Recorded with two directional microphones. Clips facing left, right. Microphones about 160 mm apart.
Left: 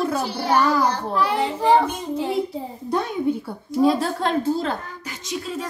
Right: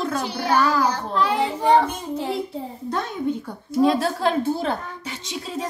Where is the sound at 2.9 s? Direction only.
10° left (ahead or behind).